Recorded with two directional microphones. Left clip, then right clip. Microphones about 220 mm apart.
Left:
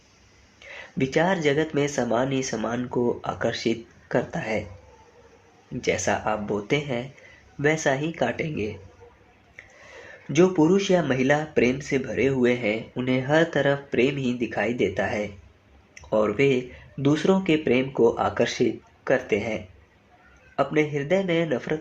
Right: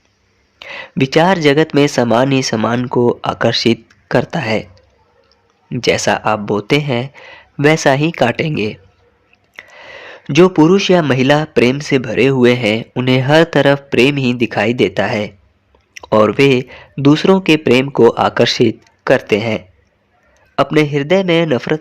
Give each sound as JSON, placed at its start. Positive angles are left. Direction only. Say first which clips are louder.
{"t": 0.6, "sound": "speech", "louder": "right 10 dB", "side_deg": -50}
{"t": 5.8, "sound": "speech", "louder": "right 11 dB", "side_deg": -50}
{"t": 10.1, "sound": "speech", "louder": "right 10 dB", "side_deg": -50}